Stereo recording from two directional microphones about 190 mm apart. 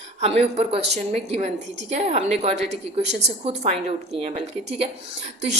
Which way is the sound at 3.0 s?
65° right (ahead or behind).